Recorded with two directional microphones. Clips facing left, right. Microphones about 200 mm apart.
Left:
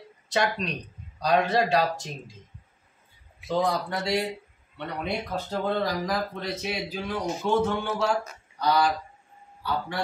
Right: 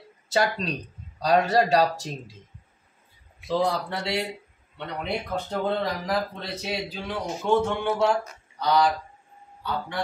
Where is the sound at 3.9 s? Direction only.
30° right (ahead or behind).